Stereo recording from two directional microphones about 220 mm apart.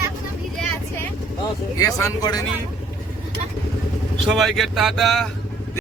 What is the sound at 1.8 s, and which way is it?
Speech, 15° left (ahead or behind).